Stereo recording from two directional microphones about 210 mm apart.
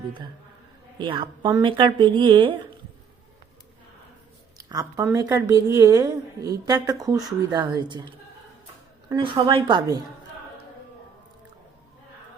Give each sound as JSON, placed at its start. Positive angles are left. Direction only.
{"t": 0.9, "sound": "speech", "side_deg": -20}
{"t": 4.5, "sound": "a woman's voice", "side_deg": -15}